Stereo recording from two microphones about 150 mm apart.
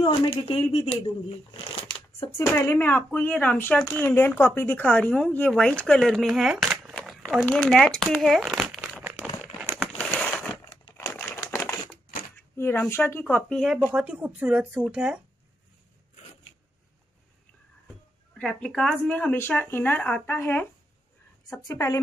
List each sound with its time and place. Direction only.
0.0 s speech: 35° left (ahead or behind)
2.5 s speech: 15° left (ahead or behind); by 8.8 s centre (ahead or behind)
9.9 s a sound: 10° left (ahead or behind)
11.2 s typewriter: 20° left (ahead or behind)
12.4 s speech: 15° left (ahead or behind)
13.9 s speech: 10° right (ahead or behind)
18.4 s a woman's voice: 5° left (ahead or behind); by 22.0 s 20° left (ahead or behind)